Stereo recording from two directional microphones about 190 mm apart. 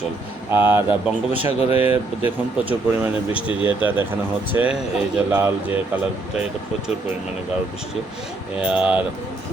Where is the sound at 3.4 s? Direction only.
25° left (ahead or behind).